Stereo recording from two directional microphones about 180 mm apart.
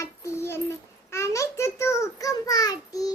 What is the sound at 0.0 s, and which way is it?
Child singing, 15° left (ahead or behind).